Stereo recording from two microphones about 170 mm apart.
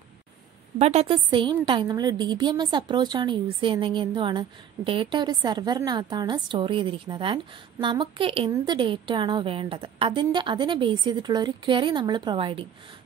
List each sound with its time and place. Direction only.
0.7 s a woman's voice: 40° right (ahead or behind)